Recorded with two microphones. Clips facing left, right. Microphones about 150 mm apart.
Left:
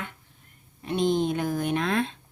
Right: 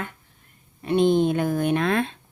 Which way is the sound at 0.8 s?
60° right (ahead or behind).